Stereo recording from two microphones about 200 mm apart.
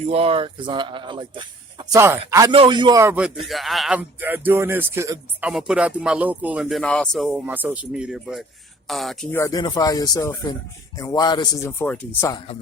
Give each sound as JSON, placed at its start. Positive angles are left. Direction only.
{"t": 0.0, "sound": "speech", "side_deg": -30}
{"t": 5.5, "sound": "speech", "side_deg": -5}
{"t": 9.3, "sound": "speech", "side_deg": 15}